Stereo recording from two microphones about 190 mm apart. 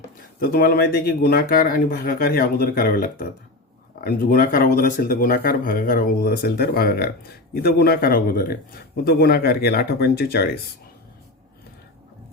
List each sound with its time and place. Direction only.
0.3 s speech: 50° left (ahead or behind)